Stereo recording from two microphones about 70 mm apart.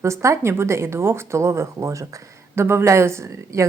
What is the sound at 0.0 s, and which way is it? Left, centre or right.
Speech, right.